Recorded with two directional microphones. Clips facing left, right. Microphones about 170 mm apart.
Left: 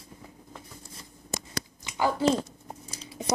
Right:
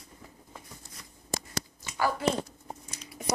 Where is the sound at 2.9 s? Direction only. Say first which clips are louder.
Left 4 dB; 30° left (ahead or behind).